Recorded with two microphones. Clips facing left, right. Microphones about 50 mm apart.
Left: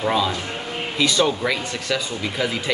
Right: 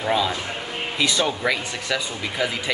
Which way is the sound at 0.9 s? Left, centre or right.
Centre.